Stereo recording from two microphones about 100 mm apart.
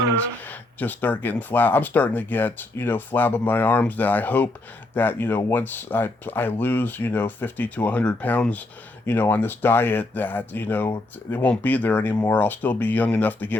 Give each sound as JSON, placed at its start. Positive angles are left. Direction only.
{"t": 0.3, "sound": "speech", "side_deg": 15}